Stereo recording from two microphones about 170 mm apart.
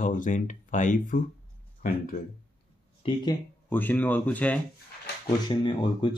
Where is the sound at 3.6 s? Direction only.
10° left (ahead or behind).